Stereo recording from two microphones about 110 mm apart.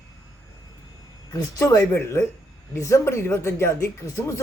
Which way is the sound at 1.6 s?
30° left (ahead or behind).